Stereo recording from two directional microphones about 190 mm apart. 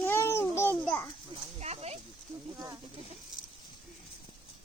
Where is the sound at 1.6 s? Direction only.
35° right (ahead or behind).